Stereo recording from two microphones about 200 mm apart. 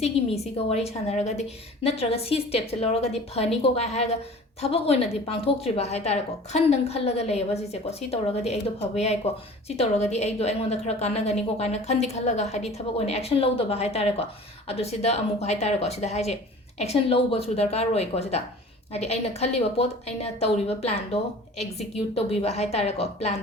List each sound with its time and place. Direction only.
0.0 s a woman's voice: 30° left (ahead or behind)
5.5 s a woman's voice: 30° left (ahead or behind)